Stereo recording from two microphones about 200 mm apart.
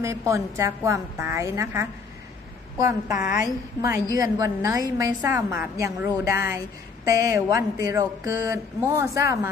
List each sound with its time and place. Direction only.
0.0 s a woman's voice: 15° right (ahead or behind)